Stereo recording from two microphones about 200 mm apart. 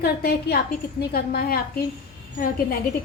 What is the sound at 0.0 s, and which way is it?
A woman's voice, 50° left (ahead or behind).